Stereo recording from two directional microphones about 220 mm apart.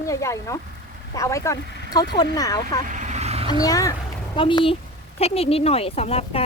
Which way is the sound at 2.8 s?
35° right (ahead or behind).